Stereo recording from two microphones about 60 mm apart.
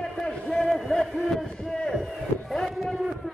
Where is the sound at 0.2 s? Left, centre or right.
Centre.